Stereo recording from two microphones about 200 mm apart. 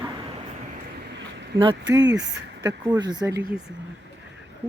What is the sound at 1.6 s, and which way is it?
Speech, 25° right (ahead or behind).